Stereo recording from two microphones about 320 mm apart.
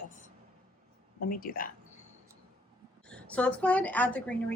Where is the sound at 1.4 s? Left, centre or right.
Left.